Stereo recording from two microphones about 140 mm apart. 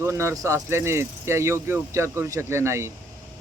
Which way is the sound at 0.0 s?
20° right (ahead or behind).